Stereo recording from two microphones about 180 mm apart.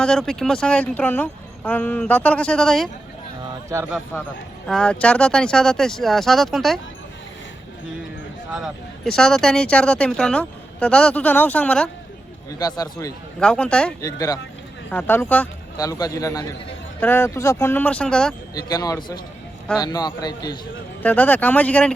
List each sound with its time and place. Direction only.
0.0 s speech: 5° left (ahead or behind)
3.9 s speech: 5° left (ahead or behind)
8.5 s speech: centre (ahead or behind)
12.5 s a man's voice: 20° left (ahead or behind)
13.4 s speech: 5° left (ahead or behind)
14.0 s a man's voice: 20° left (ahead or behind)
15.8 s a man's voice: 20° left (ahead or behind); by 18.3 s 5° left (ahead or behind)
18.5 s a man's voice: 20° left (ahead or behind)
21.0 s speech: 10° left (ahead or behind)